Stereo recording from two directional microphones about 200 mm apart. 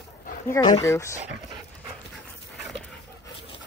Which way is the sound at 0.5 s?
15° left (ahead or behind).